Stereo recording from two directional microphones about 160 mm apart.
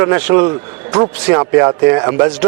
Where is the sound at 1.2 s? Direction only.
15° right (ahead or behind).